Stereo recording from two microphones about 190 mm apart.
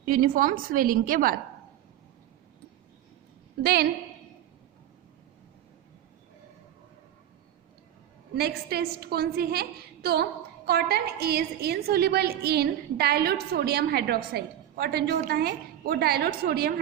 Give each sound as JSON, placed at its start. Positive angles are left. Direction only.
{"t": 0.1, "sound": "a woman's voice", "side_deg": -50}
{"t": 3.6, "sound": "a woman's voice", "side_deg": -55}
{"t": 8.4, "sound": "a woman's voice", "side_deg": -55}